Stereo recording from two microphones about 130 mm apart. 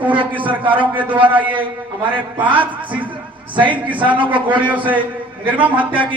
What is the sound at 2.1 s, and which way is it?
A man's voice, 40° right (ahead or behind).